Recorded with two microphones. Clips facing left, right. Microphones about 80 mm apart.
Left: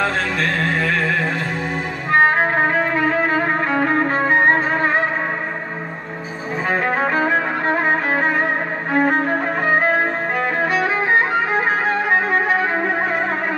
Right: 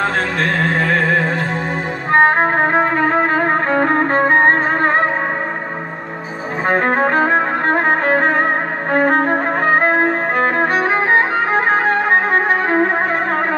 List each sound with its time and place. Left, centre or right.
2.1 s music: right
6.7 s music: right
8.9 s violin: right
11.7 s music: right